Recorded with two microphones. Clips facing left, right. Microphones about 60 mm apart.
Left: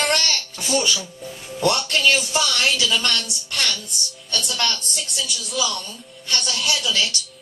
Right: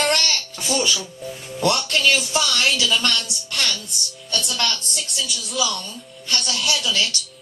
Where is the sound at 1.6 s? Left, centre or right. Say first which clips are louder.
Even; left.